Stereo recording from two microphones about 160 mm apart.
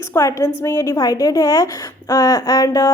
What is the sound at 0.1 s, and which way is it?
A woman's voice, 20° left (ahead or behind).